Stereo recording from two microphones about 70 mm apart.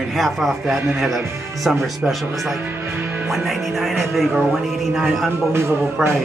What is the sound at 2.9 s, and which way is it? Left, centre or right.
Music, right.